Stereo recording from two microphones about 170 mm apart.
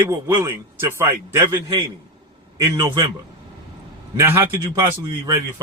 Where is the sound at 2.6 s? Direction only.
20° right (ahead or behind).